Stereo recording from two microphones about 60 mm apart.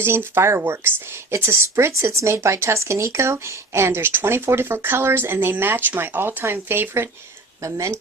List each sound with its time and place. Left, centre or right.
0.0 s speech: right
7.6 s speech: right